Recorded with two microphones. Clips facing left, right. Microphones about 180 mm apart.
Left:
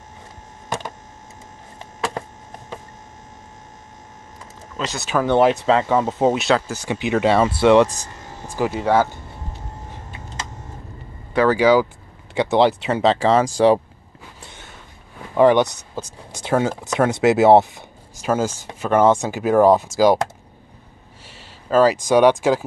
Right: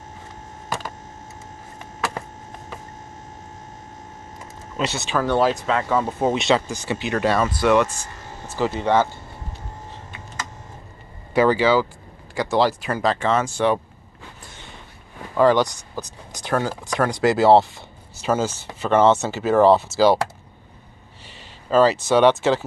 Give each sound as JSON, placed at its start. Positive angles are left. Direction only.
{"t": 4.7, "sound": "speech", "side_deg": -10}
{"t": 5.1, "sound": "speech", "side_deg": 20}
{"t": 6.2, "sound": "speech", "side_deg": 0}
{"t": 7.3, "sound": "speech", "side_deg": 25}
{"t": 8.5, "sound": "speech", "side_deg": 10}
{"t": 11.5, "sound": "speech", "side_deg": 10}
{"t": 15.3, "sound": "speech", "side_deg": 20}
{"t": 21.6, "sound": "speech", "side_deg": 5}